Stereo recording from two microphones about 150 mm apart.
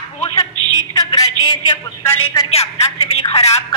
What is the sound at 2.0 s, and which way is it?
Speech, 15° left (ahead or behind).